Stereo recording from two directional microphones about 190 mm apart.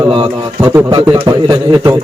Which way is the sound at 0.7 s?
15° right (ahead or behind).